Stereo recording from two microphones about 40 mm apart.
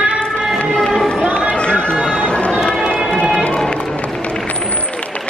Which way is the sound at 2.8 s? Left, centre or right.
Centre.